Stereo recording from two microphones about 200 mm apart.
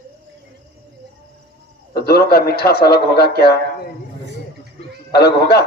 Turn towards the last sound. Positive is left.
turn(degrees=55)  # may be behind; listen again after turning